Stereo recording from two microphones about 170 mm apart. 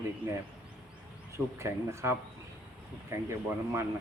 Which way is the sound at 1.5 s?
15° right (ahead or behind).